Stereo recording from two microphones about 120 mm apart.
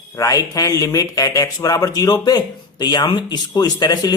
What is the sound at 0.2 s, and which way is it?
Speech, 30° left (ahead or behind).